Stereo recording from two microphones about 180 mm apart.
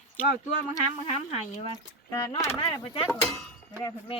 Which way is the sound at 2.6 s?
30° left (ahead or behind).